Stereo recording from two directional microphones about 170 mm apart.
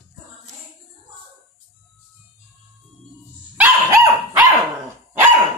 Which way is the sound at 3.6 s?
20° right (ahead or behind).